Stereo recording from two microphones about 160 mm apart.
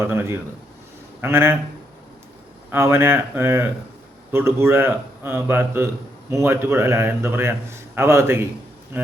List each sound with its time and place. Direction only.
0.0 s a man's voice: 15° right (ahead or behind)
2.6 s a man's voice: 15° right (ahead or behind)